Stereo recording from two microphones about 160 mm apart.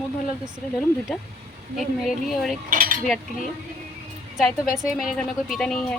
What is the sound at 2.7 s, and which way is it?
Cutlery, 60° right (ahead or behind).